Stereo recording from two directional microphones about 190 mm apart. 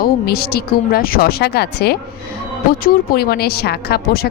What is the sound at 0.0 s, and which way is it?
Speech, 55° left (ahead or behind).